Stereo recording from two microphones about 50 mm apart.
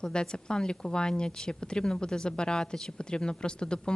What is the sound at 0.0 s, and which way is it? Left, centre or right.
A woman's voice, centre.